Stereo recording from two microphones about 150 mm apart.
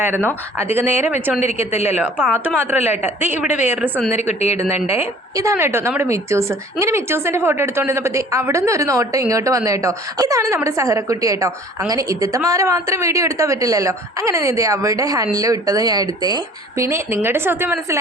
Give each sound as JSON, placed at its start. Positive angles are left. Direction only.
{"t": 0.6, "sound": "a woman's voice", "side_deg": -15}
{"t": 0.9, "sound": "a woman's voice", "side_deg": 50}
{"t": 2.6, "sound": "a woman's voice", "side_deg": -15}
{"t": 4.2, "sound": "a woman's voice", "side_deg": 45}
{"t": 4.9, "sound": "a woman's voice", "side_deg": -20}